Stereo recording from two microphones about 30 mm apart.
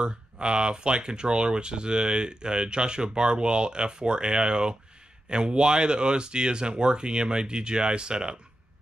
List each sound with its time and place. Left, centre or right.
0.0 s speech: right